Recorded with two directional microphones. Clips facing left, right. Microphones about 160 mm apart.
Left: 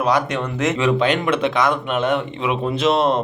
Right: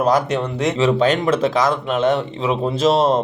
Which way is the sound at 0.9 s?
40° right (ahead or behind).